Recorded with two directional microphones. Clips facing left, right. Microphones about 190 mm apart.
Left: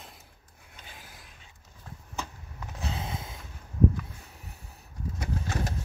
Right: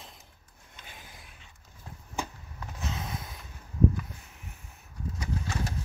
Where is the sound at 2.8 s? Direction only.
30° left (ahead or behind).